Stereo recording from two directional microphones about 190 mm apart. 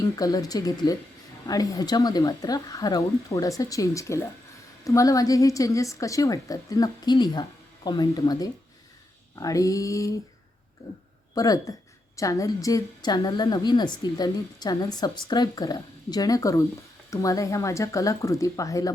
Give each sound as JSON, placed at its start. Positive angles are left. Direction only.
{"t": 0.0, "sound": "a woman's voice", "side_deg": 20}
{"t": 11.3, "sound": "a woman's voice", "side_deg": 20}